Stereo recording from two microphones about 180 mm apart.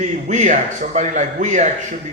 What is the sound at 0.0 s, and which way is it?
A man's voice, 45° right (ahead or behind).